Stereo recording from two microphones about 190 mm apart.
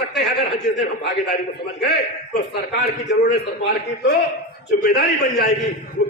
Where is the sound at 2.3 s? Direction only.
60° left (ahead or behind).